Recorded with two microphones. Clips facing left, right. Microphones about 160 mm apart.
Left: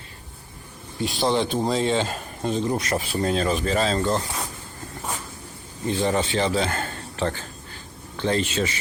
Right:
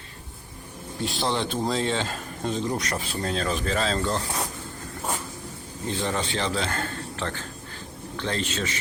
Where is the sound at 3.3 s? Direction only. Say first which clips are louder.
Left 3 dB; 10° left (ahead or behind).